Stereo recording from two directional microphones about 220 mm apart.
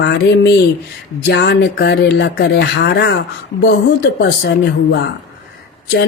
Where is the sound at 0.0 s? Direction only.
50° left (ahead or behind).